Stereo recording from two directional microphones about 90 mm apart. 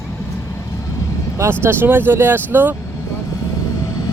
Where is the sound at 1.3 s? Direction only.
30° right (ahead or behind).